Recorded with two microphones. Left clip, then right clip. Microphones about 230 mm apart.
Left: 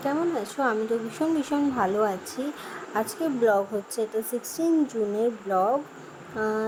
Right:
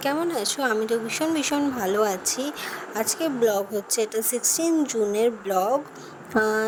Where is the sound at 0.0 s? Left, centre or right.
Right.